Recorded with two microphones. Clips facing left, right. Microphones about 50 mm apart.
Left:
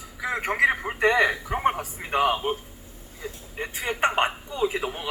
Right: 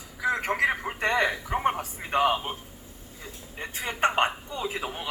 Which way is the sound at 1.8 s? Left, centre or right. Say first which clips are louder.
Left 1 dB; left.